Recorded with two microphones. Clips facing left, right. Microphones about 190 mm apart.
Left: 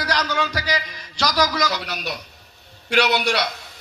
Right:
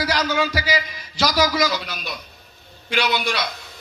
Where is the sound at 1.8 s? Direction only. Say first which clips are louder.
Left 3 dB; 70° left (ahead or behind).